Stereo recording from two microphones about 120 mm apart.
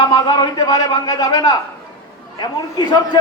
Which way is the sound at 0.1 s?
35° left (ahead or behind).